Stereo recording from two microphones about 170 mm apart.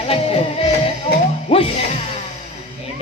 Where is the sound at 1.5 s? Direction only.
35° left (ahead or behind).